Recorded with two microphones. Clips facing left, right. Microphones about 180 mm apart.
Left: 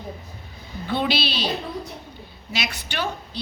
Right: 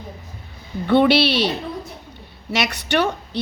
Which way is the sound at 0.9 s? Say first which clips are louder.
Right 9 dB; 65° right (ahead or behind).